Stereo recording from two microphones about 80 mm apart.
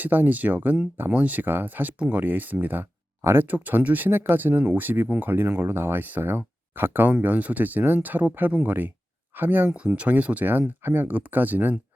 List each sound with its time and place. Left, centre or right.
0.0 s speech: right